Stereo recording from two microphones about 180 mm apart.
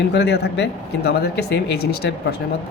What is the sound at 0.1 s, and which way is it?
Speech, 70° left (ahead or behind).